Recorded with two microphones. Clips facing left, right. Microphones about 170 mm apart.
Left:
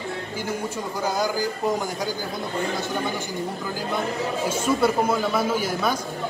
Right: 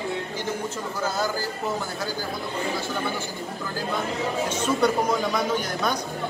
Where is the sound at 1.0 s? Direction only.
15° left (ahead or behind).